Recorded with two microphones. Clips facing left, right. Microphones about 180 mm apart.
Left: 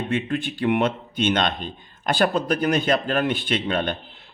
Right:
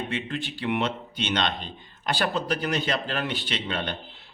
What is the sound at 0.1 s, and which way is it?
A man's voice, 50° left (ahead or behind).